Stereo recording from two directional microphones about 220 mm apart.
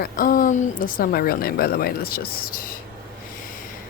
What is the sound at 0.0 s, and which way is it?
A woman's voice, 40° left (ahead or behind).